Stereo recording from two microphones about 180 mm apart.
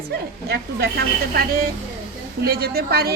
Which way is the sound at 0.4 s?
60° right (ahead or behind).